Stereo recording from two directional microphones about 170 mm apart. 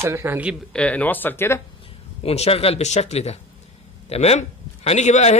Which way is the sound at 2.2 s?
35° left (ahead or behind).